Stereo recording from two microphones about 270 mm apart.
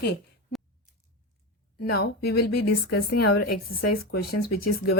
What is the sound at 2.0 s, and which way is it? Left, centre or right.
Speech, left.